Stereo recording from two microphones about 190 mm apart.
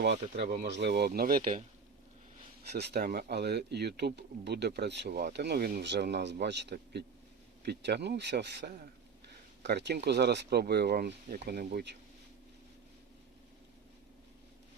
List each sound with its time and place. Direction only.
0.0 s speech: 60° right (ahead or behind); by 1.6 s 45° right (ahead or behind)
2.6 s speech: 60° right (ahead or behind)